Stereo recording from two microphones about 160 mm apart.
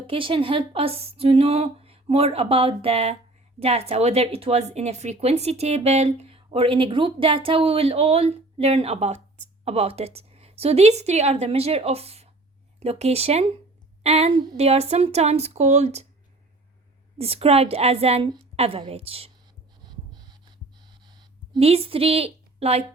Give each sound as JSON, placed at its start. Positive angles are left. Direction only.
{"t": 0.1, "sound": "speech", "side_deg": -35}
{"t": 17.2, "sound": "speech", "side_deg": -35}
{"t": 19.8, "sound": "a sound", "side_deg": -25}
{"t": 21.6, "sound": "a woman's voice", "side_deg": -40}